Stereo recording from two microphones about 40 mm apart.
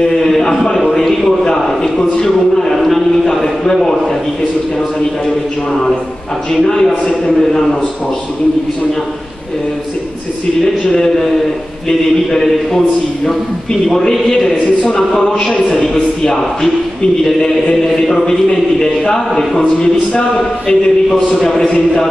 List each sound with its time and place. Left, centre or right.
0.0 s speech: centre
2.7 s a sound: centre
6.5 s speech: centre
10.9 s speech: centre